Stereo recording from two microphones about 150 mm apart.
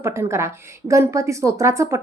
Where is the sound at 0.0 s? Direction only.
20° right (ahead or behind).